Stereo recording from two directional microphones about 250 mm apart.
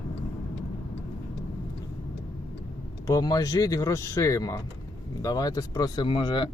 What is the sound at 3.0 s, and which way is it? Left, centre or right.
Speech, centre.